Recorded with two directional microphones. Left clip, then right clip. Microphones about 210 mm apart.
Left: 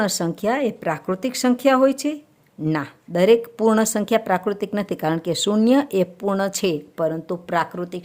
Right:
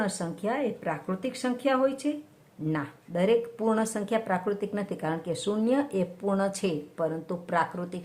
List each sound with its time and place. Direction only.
0.0 s speech: 50° left (ahead or behind)